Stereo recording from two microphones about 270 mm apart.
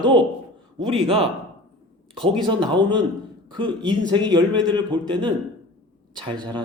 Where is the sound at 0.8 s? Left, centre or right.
Centre.